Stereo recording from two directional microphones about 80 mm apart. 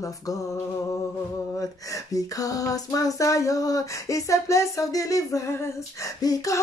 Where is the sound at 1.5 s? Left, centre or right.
Left.